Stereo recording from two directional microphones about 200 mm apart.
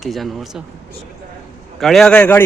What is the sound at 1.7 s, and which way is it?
Speech, centre (ahead or behind).